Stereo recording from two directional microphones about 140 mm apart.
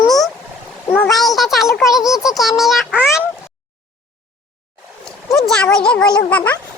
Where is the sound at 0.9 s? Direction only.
5° left (ahead or behind).